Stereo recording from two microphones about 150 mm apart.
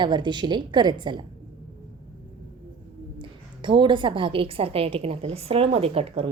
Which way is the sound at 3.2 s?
35° right (ahead or behind).